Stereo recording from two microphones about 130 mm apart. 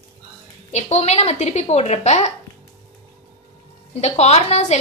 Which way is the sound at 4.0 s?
55° left (ahead or behind).